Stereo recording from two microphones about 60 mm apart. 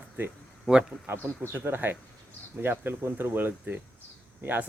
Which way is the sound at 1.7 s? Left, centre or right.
Right.